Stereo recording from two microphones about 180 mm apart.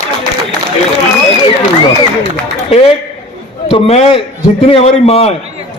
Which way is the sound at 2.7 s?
35° left (ahead or behind).